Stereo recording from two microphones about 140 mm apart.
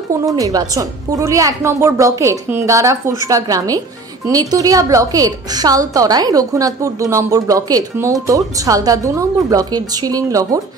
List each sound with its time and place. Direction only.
0.2 s a woman's voice: 25° right (ahead or behind)